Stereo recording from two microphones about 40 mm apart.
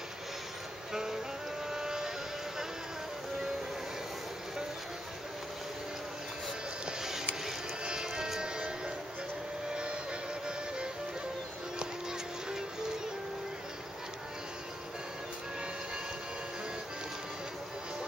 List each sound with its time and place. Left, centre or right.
0.9 s music: centre
1.7 s motorboat: centre
6.9 s music: centre